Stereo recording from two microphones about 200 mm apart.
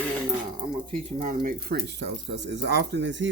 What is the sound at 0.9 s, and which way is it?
Speech, 40° right (ahead or behind).